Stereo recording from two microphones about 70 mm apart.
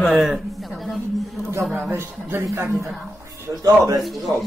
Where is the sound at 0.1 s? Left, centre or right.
Centre.